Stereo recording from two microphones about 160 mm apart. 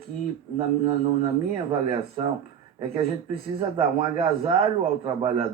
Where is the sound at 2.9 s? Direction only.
35° right (ahead or behind).